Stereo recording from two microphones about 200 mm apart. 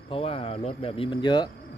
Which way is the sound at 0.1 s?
30° left (ahead or behind).